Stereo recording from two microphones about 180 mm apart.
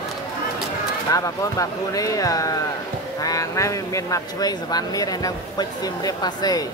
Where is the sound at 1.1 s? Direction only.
20° left (ahead or behind).